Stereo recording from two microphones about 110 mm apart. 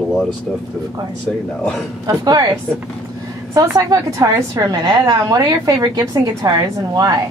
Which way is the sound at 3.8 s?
30° right (ahead or behind).